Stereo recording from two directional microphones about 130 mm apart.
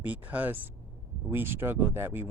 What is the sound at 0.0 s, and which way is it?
Speech, 10° right (ahead or behind).